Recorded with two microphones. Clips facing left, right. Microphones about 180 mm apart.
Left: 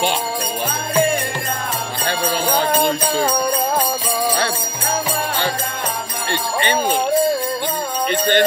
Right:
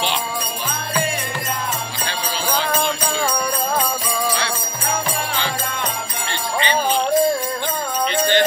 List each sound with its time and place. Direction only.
2.0 s jingle bell: 50° left (ahead or behind)
8.1 s music: 50° left (ahead or behind)